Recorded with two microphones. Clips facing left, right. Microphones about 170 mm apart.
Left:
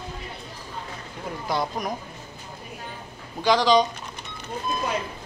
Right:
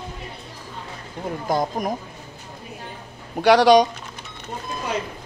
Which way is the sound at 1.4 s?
45° right (ahead or behind).